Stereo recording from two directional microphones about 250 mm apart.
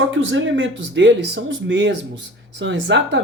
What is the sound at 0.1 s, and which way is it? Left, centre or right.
Speech, right.